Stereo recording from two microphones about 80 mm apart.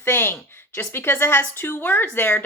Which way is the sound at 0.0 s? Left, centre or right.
Left.